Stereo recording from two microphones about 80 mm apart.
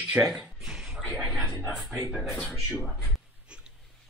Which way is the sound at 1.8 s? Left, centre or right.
Centre.